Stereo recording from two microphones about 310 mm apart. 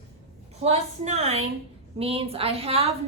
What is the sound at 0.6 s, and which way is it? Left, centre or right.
A woman's voice, right.